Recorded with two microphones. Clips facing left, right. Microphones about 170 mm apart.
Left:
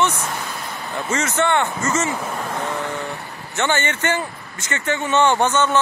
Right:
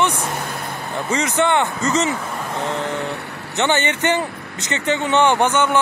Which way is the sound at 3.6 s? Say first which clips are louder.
Right 2 dB; 20° right (ahead or behind).